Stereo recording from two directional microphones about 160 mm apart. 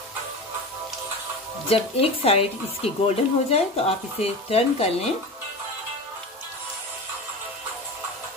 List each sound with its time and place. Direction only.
1.7 s speech: 40° left (ahead or behind)